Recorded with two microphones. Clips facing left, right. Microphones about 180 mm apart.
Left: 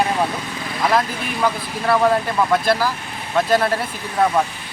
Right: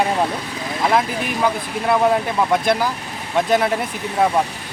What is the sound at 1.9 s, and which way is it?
Speech, 15° right (ahead or behind).